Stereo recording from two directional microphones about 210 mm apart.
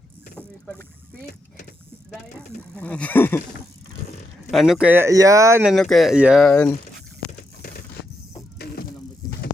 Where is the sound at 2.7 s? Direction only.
5° left (ahead or behind).